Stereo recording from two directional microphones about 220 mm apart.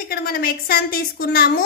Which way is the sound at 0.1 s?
45° left (ahead or behind).